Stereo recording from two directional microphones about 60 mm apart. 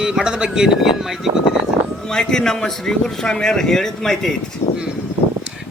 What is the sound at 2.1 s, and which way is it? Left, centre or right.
Speech, centre.